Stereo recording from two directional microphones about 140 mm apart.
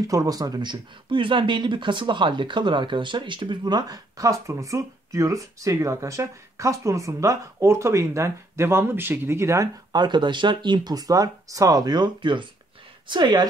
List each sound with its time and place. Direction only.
0.1 s speech: 25° right (ahead or behind)